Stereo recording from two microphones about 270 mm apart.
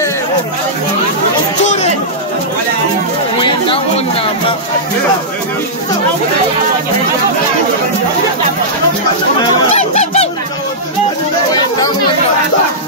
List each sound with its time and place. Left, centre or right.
1.6 s chatter: left
3.3 s chatter: centre
9.8 s honk: left